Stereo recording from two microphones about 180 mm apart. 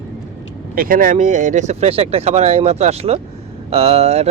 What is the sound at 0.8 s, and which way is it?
Speech, 50° right (ahead or behind).